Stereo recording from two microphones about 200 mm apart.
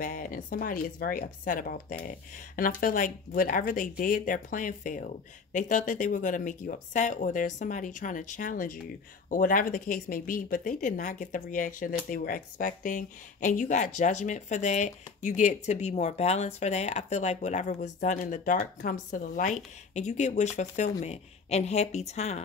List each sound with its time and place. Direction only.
0.0 s speech: 40° left (ahead or behind)